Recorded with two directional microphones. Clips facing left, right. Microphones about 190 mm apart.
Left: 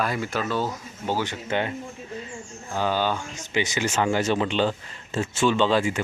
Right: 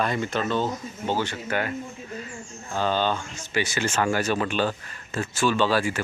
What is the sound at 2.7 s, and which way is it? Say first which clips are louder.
Speech: even; 10° left (ahead or behind).